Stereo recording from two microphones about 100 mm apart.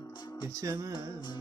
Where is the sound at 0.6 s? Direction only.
35° right (ahead or behind).